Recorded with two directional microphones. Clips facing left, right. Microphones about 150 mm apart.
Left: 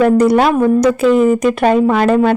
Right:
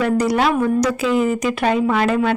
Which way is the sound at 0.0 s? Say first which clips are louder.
Left 7 dB; 50° left (ahead or behind).